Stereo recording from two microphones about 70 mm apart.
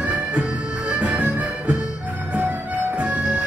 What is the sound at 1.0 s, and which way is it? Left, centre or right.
Music, centre.